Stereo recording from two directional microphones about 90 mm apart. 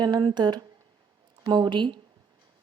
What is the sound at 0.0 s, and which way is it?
Speech, 55° right (ahead or behind).